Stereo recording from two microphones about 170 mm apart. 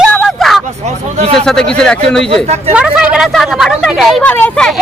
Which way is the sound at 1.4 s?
5° left (ahead or behind).